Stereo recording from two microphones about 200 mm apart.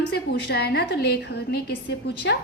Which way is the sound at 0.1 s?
55° left (ahead or behind).